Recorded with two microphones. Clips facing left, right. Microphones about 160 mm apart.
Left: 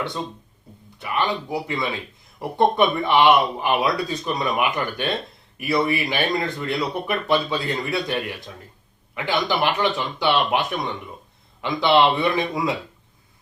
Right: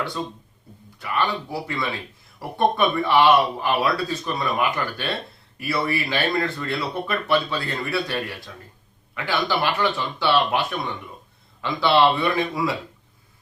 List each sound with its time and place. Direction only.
0.0 s speech: 20° left (ahead or behind)